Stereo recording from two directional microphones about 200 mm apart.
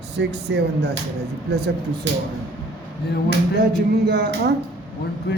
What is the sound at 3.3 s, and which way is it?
Speech, 50° right (ahead or behind).